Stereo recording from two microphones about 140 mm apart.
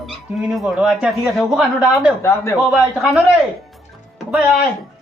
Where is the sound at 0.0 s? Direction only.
Centre (ahead or behind).